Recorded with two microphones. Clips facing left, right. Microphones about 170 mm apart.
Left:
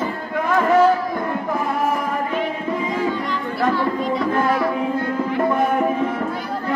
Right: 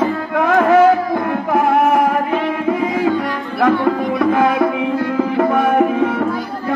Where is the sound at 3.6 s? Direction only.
60° right (ahead or behind).